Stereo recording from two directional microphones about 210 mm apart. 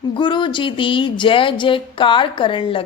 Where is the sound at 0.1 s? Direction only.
20° left (ahead or behind).